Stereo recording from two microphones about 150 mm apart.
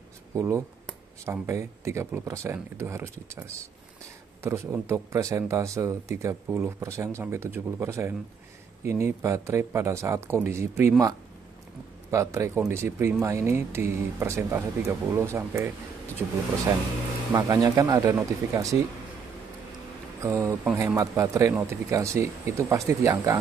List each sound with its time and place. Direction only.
0.4 s speech: 20° right (ahead or behind)
17.3 s speech: 25° right (ahead or behind)
20.2 s speech: 20° right (ahead or behind)